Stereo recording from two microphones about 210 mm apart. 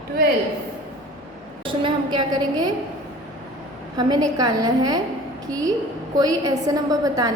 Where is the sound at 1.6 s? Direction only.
25° right (ahead or behind).